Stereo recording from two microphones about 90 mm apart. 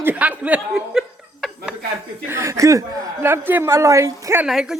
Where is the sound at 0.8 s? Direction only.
Centre (ahead or behind).